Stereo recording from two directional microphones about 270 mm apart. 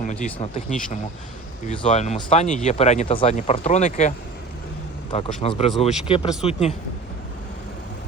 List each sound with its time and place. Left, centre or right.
0.0 s speech: left
5.1 s speech: left